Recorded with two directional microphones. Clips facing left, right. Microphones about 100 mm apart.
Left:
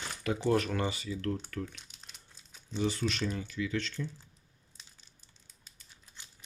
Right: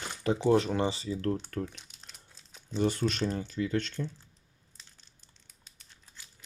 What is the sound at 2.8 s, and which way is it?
Speech, 50° right (ahead or behind).